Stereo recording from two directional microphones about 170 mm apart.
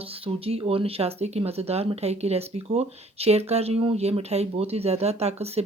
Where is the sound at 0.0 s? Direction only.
35° right (ahead or behind).